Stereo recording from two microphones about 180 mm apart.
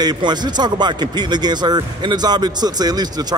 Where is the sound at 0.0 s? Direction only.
25° right (ahead or behind).